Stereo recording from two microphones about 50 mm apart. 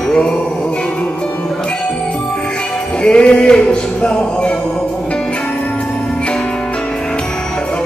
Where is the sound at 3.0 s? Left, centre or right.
Centre.